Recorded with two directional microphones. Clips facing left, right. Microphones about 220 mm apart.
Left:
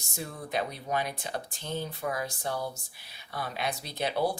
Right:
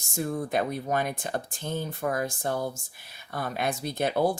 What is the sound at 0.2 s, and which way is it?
Speech, 50° right (ahead or behind).